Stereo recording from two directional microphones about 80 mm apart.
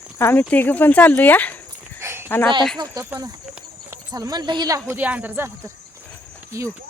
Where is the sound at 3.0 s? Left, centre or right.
Right.